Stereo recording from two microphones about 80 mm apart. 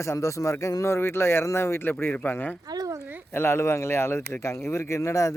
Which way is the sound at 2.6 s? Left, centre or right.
Right.